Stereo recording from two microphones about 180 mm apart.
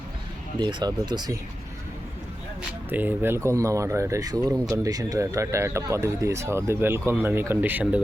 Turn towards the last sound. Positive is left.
turn(degrees=-10)  # may be behind; listen again after turning